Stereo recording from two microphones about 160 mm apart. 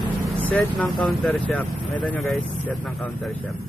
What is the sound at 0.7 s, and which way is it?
Speech, centre (ahead or behind).